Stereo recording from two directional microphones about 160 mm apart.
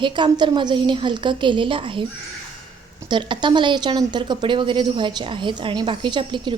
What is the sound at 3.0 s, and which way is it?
Speech, 30° right (ahead or behind).